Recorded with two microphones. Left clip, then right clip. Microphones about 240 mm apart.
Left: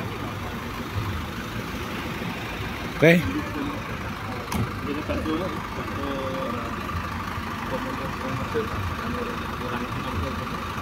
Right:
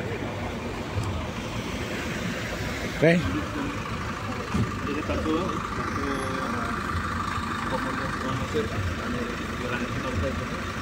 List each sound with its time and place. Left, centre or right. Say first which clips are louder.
3.0 s speech: left 4 dB; centre